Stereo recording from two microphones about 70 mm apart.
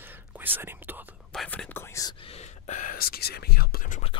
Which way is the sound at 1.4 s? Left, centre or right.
Left.